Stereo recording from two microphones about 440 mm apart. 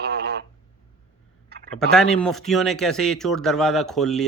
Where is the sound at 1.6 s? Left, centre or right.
Centre.